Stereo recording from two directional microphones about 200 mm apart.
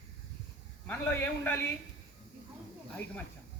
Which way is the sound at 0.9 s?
10° left (ahead or behind).